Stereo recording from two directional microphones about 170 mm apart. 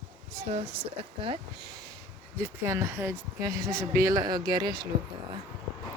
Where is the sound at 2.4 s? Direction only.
15° right (ahead or behind).